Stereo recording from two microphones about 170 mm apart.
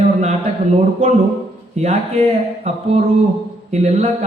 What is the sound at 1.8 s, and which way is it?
A man's voice, 40° right (ahead or behind).